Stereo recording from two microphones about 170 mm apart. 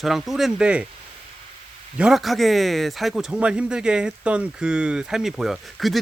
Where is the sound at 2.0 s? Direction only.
Centre (ahead or behind).